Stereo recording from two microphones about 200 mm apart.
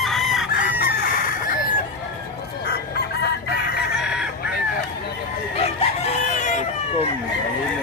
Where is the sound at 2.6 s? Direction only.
50° left (ahead or behind).